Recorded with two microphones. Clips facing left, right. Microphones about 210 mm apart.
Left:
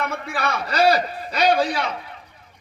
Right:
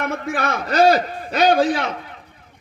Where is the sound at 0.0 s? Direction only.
50° right (ahead or behind).